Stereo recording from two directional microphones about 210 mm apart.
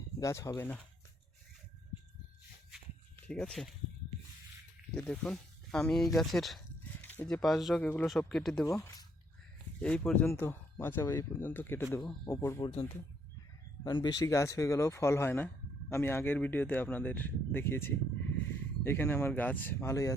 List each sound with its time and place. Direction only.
0.2 s speech: 15° left (ahead or behind)
3.2 s speech: 5° left (ahead or behind)
4.9 s speech: 5° left (ahead or behind)
8.6 s speech: 15° left (ahead or behind)
9.8 s speech: 5° left (ahead or behind)
13.8 s speech: 20° left (ahead or behind)